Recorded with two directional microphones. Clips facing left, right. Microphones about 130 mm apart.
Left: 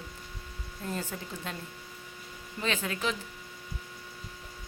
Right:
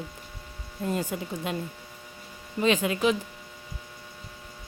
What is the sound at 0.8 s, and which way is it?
Speech, 15° right (ahead or behind).